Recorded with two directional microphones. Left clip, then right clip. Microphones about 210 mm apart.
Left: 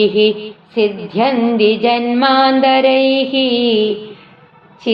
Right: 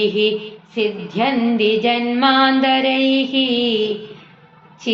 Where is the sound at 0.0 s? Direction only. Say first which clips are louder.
Left 5 dB; 45° left (ahead or behind).